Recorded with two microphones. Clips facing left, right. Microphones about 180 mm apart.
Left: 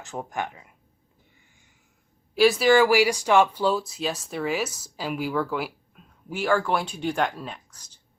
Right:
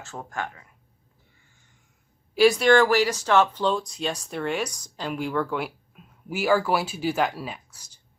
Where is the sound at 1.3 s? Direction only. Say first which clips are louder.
Left 2 dB; 15° left (ahead or behind).